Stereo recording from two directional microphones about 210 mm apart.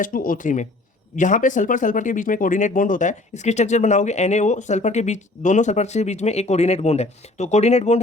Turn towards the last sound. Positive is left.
turn(degrees=30)  # may be behind; listen again after turning